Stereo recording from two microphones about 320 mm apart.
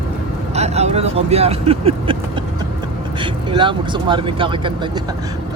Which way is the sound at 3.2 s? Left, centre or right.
Centre.